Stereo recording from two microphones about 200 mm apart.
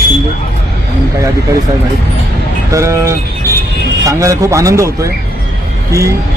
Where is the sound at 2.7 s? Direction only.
15° right (ahead or behind).